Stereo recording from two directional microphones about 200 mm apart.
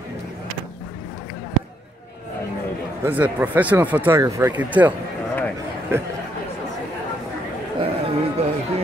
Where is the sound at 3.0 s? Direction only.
10° right (ahead or behind).